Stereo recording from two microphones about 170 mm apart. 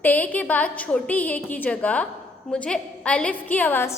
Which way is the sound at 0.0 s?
10° left (ahead or behind).